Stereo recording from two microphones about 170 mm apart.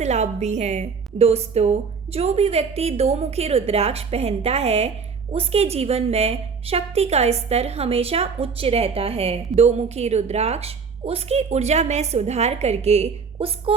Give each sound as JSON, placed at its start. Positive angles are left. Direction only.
{"t": 0.0, "sound": "a woman's voice", "side_deg": -40}